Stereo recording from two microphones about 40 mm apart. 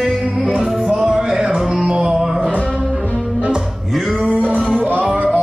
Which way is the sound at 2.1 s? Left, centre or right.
Centre.